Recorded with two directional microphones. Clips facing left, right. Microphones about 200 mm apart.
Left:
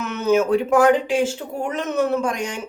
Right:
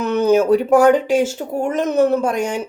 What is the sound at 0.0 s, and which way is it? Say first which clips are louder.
A woman's voice: right 4 dB; 35° right (ahead or behind).